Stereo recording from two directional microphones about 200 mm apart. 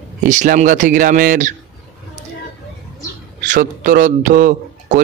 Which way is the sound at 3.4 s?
40° right (ahead or behind).